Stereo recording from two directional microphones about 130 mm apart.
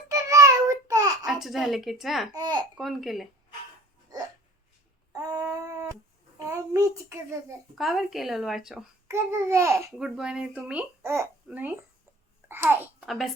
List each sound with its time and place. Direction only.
0.1 s child singing: 25° right (ahead or behind)
1.3 s speech: centre (ahead or behind)
2.3 s a child's voice: 30° right (ahead or behind)
2.7 s speech: centre (ahead or behind)
5.1 s a sound: 25° right (ahead or behind)
7.8 s speech: centre (ahead or behind)
9.0 s a child's voice: 20° right (ahead or behind)
10.0 s speech: 5° right (ahead or behind)
11.0 s a child's voice: 20° right (ahead or behind)
12.5 s babbling: 20° right (ahead or behind)
13.1 s a woman's voice: centre (ahead or behind)